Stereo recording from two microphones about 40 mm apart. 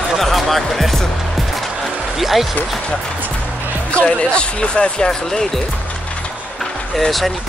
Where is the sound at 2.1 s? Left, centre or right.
Centre.